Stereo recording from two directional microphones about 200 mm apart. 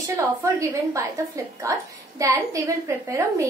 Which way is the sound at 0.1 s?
15° right (ahead or behind).